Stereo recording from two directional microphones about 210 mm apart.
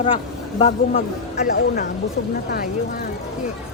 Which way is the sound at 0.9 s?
40° left (ahead or behind).